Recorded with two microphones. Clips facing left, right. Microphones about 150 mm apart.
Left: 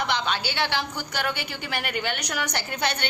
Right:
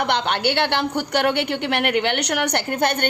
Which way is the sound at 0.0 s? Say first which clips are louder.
Right 6 dB; 60° right (ahead or behind).